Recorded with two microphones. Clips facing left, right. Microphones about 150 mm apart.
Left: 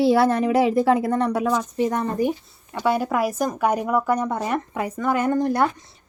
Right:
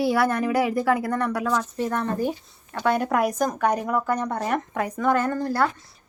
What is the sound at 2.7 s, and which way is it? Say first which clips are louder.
Speech: left 1 dB; 5° left (ahead or behind).